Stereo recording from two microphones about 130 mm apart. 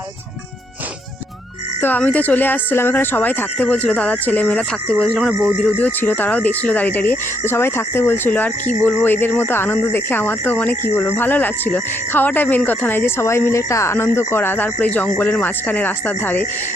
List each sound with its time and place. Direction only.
1.8 s speech: 15° left (ahead or behind)
5.6 s speech: 15° left (ahead or behind)